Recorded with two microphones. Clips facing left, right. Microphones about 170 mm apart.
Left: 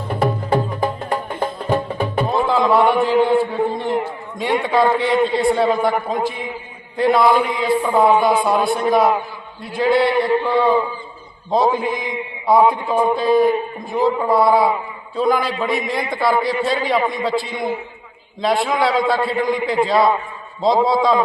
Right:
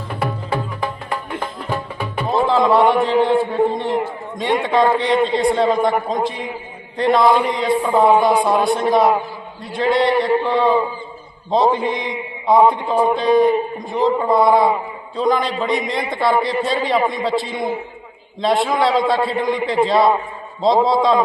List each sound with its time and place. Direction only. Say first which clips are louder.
0.5 s music: left 4 dB; 40° left (ahead or behind)
2.3 s a man's voice: right 3 dB; centre (ahead or behind)